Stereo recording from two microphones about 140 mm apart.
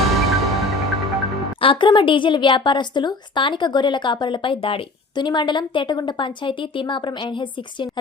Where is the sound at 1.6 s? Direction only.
35° left (ahead or behind).